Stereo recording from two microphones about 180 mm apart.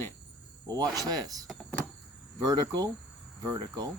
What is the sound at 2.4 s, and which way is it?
Speech, 20° right (ahead or behind).